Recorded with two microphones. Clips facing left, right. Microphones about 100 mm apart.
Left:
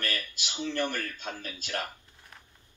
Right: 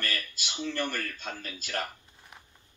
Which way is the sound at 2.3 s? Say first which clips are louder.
Right 1 dB; 15° right (ahead or behind).